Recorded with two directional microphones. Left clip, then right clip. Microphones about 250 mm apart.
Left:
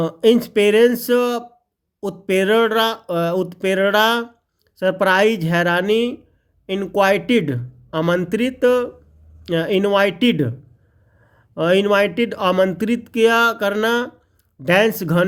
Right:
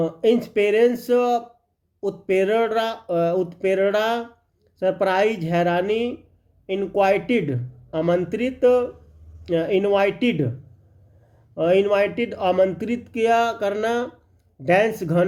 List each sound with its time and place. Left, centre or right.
0.0 s speech: left
11.5 s speech: left